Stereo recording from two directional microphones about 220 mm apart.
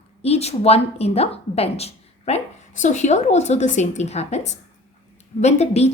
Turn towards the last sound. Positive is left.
turn(degrees=30)  # may be behind; listen again after turning